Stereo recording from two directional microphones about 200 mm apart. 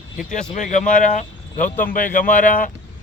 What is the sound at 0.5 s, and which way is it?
Speech, 40° left (ahead or behind).